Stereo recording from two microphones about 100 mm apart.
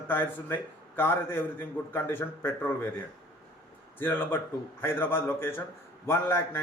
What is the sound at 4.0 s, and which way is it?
Speech, 20° left (ahead or behind).